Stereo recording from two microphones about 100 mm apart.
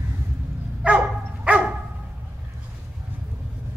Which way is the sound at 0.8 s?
15° right (ahead or behind).